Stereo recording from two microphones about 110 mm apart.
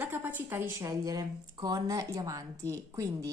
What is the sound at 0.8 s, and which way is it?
Speech, 35° right (ahead or behind).